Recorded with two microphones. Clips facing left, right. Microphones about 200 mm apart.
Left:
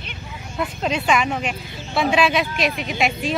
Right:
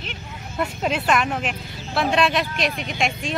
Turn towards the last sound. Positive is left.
turn(degrees=0)  # may be behind; listen again after turning